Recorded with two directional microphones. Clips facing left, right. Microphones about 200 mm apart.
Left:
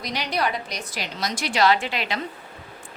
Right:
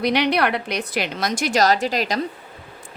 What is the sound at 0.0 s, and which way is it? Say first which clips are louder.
A woman's voice: right 7 dB; 65° right (ahead or behind).